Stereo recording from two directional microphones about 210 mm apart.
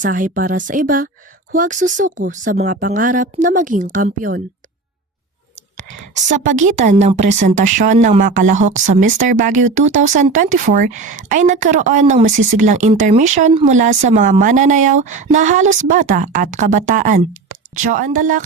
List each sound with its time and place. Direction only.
0.0 s speech: 40° right (ahead or behind)
5.7 s speech: 35° right (ahead or behind)